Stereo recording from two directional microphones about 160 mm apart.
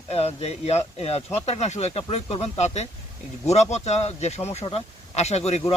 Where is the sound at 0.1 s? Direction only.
40° left (ahead or behind).